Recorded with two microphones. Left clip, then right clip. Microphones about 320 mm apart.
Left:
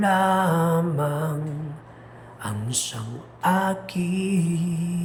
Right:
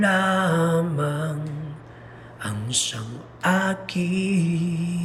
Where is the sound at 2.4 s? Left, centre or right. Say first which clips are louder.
Right 3 dB; centre.